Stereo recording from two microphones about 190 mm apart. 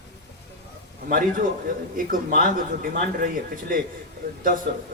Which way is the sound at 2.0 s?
45° right (ahead or behind).